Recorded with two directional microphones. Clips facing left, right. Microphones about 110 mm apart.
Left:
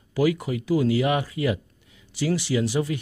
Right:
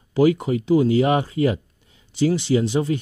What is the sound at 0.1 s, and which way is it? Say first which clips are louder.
Speech: right 5 dB; 25° right (ahead or behind).